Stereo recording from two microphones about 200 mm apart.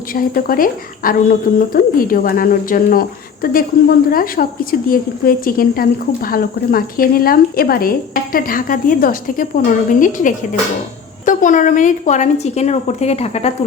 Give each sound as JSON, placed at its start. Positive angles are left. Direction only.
{"t": 0.1, "sound": "a woman's voice", "side_deg": 45}